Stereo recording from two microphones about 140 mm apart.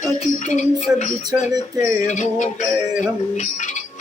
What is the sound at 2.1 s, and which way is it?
Music, 60° left (ahead or behind).